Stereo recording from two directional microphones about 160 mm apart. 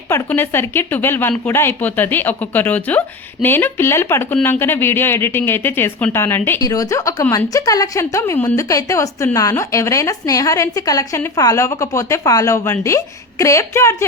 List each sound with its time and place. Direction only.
0.1 s a woman's voice: 15° left (ahead or behind)